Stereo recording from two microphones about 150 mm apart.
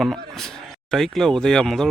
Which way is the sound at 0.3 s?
5° left (ahead or behind).